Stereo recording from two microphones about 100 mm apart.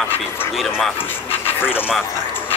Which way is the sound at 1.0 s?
20° left (ahead or behind).